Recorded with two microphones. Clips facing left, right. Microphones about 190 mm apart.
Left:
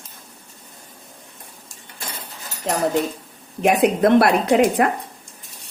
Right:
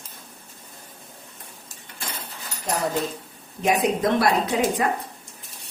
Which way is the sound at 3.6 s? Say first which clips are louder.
Left 5 dB; 65° left (ahead or behind).